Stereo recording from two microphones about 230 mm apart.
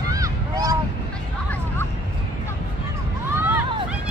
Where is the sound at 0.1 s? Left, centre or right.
Centre.